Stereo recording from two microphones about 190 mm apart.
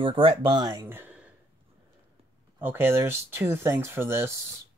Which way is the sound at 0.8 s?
10° right (ahead or behind).